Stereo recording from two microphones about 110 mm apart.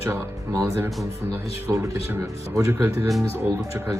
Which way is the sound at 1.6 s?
30° right (ahead or behind).